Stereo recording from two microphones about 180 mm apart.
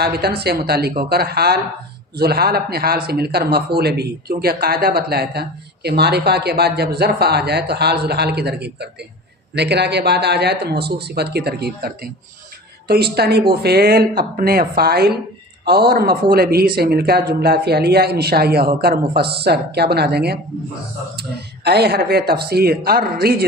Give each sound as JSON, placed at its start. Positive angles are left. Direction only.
{"t": 0.0, "sound": "speech", "side_deg": -60}